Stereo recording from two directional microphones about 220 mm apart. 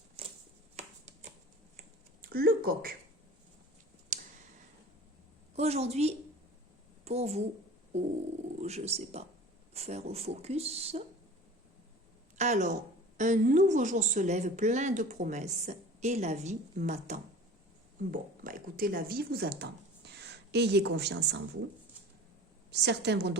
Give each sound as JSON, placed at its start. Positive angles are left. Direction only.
{"t": 0.2, "sound": "finger snapping", "side_deg": -25}
{"t": 0.8, "sound": "a sound", "side_deg": -30}
{"t": 2.2, "sound": "a woman's voice", "side_deg": -45}
{"t": 4.1, "sound": "clicking", "side_deg": -30}
{"t": 5.5, "sound": "a child's voice", "side_deg": -30}
{"t": 8.6, "sound": "speech", "side_deg": -30}
{"t": 12.4, "sound": "speech", "side_deg": -35}
{"t": 22.7, "sound": "a woman's voice", "side_deg": -50}